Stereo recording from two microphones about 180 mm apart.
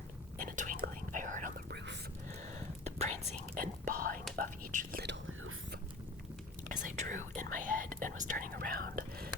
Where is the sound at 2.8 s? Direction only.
35° right (ahead or behind).